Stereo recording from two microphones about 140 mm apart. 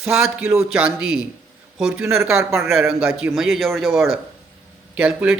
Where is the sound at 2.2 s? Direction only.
20° right (ahead or behind).